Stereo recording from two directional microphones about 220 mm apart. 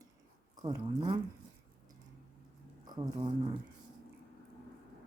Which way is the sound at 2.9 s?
20° right (ahead or behind).